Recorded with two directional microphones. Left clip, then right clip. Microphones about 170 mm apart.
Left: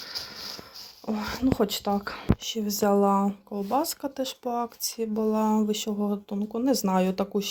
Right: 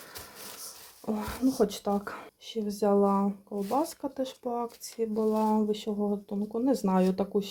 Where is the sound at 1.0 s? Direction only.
5° right (ahead or behind).